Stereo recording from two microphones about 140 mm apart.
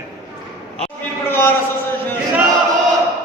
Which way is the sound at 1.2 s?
15° left (ahead or behind).